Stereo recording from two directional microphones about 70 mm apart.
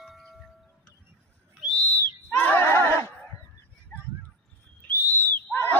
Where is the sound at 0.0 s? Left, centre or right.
Centre.